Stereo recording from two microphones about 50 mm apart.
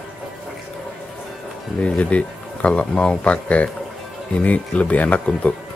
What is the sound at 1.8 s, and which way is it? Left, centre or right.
Speech, left.